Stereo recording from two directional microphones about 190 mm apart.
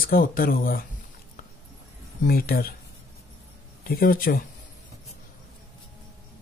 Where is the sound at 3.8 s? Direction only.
50° left (ahead or behind).